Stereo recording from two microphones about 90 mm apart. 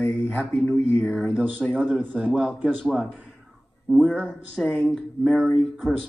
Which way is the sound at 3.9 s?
10° left (ahead or behind).